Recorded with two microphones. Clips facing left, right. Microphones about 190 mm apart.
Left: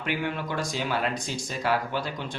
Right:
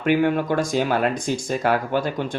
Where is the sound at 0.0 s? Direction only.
50° right (ahead or behind).